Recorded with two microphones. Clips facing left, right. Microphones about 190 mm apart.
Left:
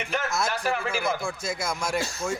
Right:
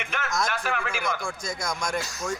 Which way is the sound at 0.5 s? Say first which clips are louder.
Left 2 dB; 40° left (ahead or behind).